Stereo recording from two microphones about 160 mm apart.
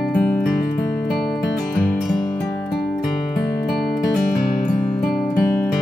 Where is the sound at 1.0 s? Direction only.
Centre (ahead or behind).